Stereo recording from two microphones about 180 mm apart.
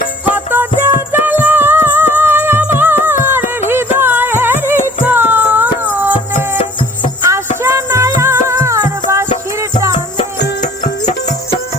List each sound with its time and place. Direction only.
0.3 s music: 10° right (ahead or behind)
7.2 s music: 15° right (ahead or behind)
10.6 s music: 45° left (ahead or behind)